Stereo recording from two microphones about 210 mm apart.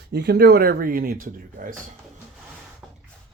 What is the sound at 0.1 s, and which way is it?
Speech, 50° right (ahead or behind).